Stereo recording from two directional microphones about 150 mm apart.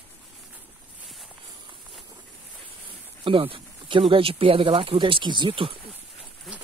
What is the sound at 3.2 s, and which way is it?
Speech, 35° right (ahead or behind).